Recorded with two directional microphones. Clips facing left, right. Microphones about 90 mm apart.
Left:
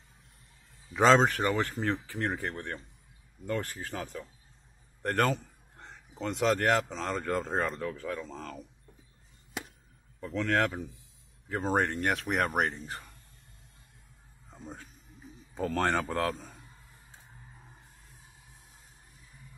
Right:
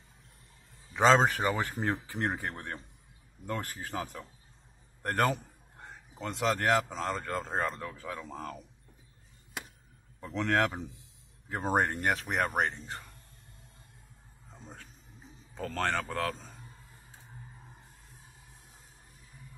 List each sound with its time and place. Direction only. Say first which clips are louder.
0.9 s speech: left 1 dB; centre (ahead or behind)
5.0 s a man's voice: left 1 dB; 5° right (ahead or behind)
10.2 s speech: even; 20° right (ahead or behind)
12.1 s speech: left 1 dB; centre (ahead or behind)
15.5 s speech: left 3 dB; 10° left (ahead or behind)